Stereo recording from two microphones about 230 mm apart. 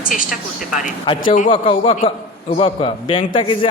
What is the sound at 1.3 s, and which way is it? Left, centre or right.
A man's voice, left.